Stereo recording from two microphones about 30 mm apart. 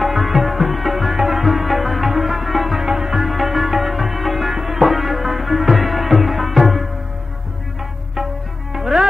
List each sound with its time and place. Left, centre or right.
0.0 s music: centre
2.8 s music: centre
8.7 s music: centre